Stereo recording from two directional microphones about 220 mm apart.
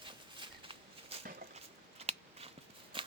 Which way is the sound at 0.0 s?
20° right (ahead or behind).